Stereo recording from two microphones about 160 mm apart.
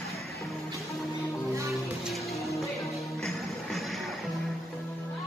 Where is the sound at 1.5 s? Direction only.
20° right (ahead or behind).